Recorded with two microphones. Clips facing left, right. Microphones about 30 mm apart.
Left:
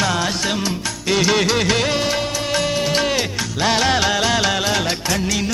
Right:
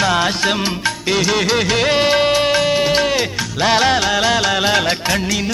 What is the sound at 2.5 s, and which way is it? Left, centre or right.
Music, right.